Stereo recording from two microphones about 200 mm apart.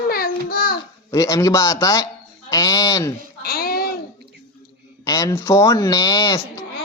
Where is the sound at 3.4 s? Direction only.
50° left (ahead or behind).